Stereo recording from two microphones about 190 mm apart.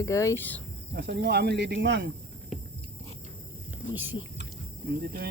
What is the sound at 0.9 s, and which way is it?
Speech, 65° right (ahead or behind).